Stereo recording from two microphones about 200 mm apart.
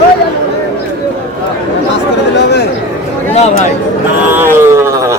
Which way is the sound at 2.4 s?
55° left (ahead or behind).